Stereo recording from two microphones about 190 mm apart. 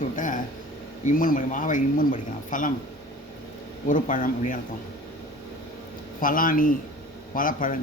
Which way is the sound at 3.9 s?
45° left (ahead or behind).